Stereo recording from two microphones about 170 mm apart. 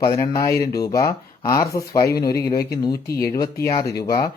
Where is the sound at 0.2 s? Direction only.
20° left (ahead or behind).